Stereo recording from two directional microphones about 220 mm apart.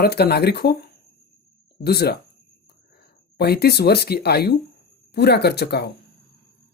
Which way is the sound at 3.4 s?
45° left (ahead or behind).